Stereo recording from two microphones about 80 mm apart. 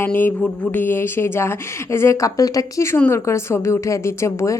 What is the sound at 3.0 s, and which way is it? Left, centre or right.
A woman's voice, left.